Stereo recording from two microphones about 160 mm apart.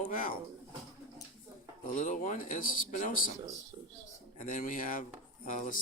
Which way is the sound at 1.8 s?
50° left (ahead or behind).